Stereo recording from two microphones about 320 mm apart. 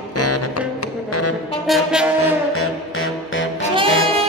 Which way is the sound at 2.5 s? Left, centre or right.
Left.